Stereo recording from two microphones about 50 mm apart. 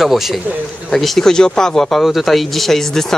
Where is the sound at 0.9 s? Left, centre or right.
Centre.